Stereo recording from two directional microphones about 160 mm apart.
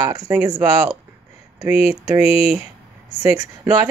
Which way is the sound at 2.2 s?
40° left (ahead or behind).